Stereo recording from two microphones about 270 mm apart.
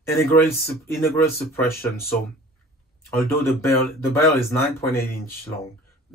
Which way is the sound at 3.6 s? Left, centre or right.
Centre.